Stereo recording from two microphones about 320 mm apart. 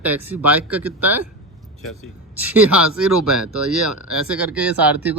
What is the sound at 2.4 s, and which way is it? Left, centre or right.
Speech, centre.